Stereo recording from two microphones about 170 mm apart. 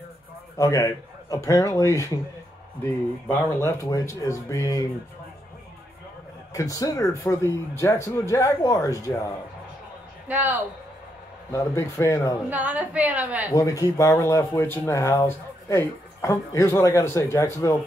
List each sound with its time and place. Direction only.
0.6 s speech: 20° left (ahead or behind)
3.3 s speech: 15° left (ahead or behind)
6.5 s speech: 20° left (ahead or behind)
10.2 s a woman's voice: 10° right (ahead or behind)
11.5 s speech: 15° left (ahead or behind)
12.4 s a woman's voice: 10° right (ahead or behind)
13.5 s speech: 20° left (ahead or behind)